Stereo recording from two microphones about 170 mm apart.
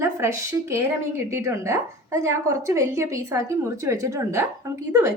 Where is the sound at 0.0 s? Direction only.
15° right (ahead or behind).